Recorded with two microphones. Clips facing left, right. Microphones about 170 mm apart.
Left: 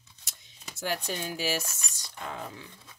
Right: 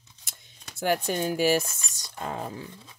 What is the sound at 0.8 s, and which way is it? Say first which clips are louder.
Speech: right 7 dB; 55° right (ahead or behind).